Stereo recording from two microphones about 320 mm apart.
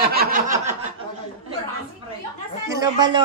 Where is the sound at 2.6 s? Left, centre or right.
Centre.